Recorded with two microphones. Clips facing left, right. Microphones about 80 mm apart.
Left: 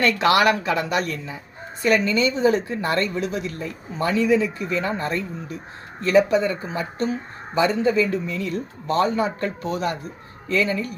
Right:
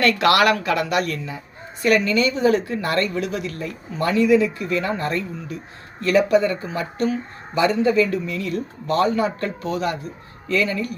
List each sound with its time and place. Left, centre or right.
0.5 s speech: left